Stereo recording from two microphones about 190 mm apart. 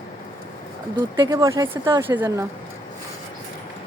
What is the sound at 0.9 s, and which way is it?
Speech, 20° right (ahead or behind).